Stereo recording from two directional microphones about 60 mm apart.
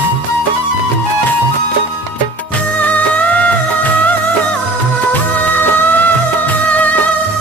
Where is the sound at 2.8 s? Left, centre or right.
Left.